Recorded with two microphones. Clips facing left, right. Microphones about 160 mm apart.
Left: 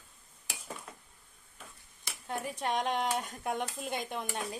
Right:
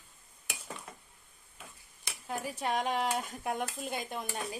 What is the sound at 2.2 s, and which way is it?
A woman's voice, 5° right (ahead or behind).